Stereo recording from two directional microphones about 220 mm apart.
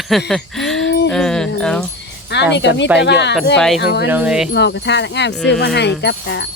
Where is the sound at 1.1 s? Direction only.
5° left (ahead or behind).